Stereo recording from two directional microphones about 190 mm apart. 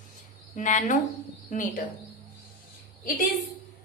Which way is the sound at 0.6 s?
40° left (ahead or behind).